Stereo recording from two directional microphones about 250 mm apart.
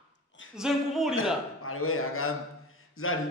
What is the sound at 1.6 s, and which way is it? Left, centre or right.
A man's voice, left.